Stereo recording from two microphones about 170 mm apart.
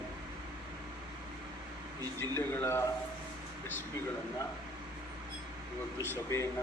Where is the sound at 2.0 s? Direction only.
25° right (ahead or behind).